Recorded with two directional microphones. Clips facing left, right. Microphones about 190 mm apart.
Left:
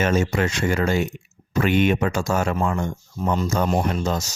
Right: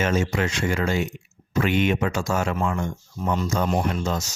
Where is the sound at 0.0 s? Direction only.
40° left (ahead or behind).